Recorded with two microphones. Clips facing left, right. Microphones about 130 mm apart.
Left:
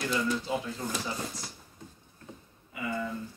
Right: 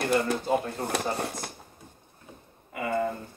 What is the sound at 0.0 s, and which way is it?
Speech, 60° right (ahead or behind).